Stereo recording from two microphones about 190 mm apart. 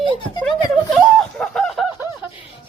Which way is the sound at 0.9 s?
5° left (ahead or behind).